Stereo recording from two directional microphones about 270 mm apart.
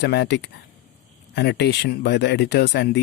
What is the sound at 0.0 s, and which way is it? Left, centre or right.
Speech, left.